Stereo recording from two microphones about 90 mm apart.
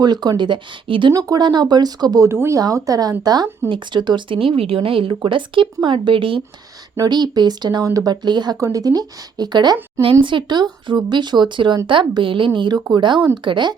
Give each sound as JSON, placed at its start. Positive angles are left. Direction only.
{"t": 0.0, "sound": "speech", "side_deg": -50}
{"t": 1.1, "sound": "speech", "side_deg": -50}
{"t": 2.3, "sound": "speech", "side_deg": -25}
{"t": 2.6, "sound": "speech", "side_deg": -40}
{"t": 3.7, "sound": "speech", "side_deg": -55}
{"t": 7.1, "sound": "speech", "side_deg": -50}
{"t": 8.5, "sound": "speech", "side_deg": -40}
{"t": 10.0, "sound": "speech", "side_deg": -75}
{"t": 12.5, "sound": "speech", "side_deg": -55}